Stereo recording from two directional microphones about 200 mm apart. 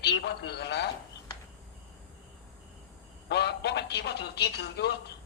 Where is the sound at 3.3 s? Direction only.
55° left (ahead or behind).